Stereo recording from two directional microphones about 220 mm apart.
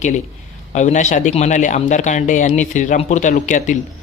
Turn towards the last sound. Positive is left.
turn(degrees=35)  # may be behind; listen again after turning